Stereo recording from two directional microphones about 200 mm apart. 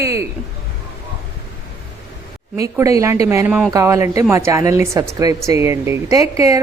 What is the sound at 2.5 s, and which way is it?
A man's voice, 15° right (ahead or behind).